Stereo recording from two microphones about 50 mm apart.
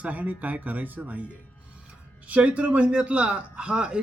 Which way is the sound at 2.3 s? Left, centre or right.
Right.